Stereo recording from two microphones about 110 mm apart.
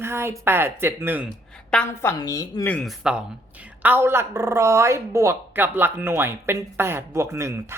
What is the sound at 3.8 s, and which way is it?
Speech, 20° right (ahead or behind).